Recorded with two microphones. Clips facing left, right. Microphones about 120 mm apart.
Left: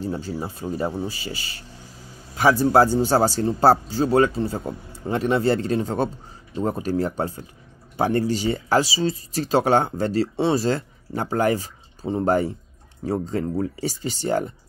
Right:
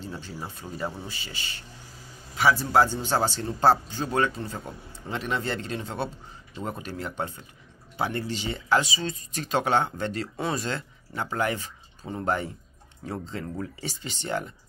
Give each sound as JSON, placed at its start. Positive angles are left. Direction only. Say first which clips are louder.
{"t": 0.0, "sound": "speech", "louder": "left 9 dB", "side_deg": 40}
{"t": 2.6, "sound": "speech", "louder": "left 6 dB", "side_deg": 40}